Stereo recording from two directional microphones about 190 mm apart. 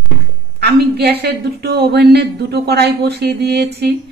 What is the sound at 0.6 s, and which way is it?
A woman's voice, 55° right (ahead or behind).